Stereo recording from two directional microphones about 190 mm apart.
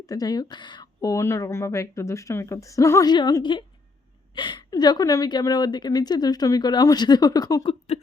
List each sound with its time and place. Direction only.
0.1 s a woman's voice: 20° left (ahead or behind)